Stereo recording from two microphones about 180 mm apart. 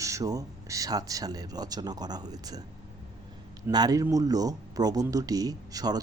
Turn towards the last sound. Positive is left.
turn(degrees=-20)  # may be behind; listen again after turning